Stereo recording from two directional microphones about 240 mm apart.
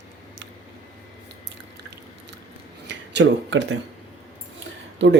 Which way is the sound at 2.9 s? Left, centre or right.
Right.